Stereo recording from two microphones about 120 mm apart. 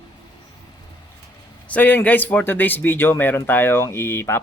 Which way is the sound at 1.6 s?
15° left (ahead or behind).